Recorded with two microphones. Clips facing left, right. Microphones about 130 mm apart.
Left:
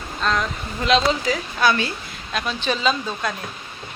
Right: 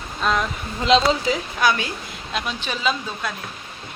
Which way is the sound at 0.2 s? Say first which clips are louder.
Right 1 dB; 5° right (ahead or behind).